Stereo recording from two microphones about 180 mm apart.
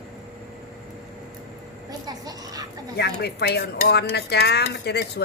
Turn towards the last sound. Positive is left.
turn(degrees=65)  # may be behind; listen again after turning